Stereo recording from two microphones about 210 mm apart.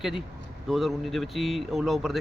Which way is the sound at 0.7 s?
Centre (ahead or behind).